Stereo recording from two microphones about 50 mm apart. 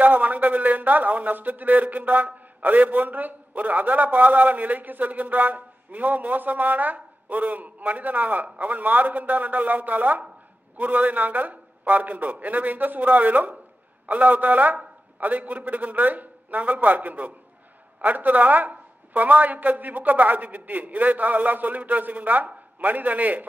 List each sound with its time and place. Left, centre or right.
0.0 s a man's voice: right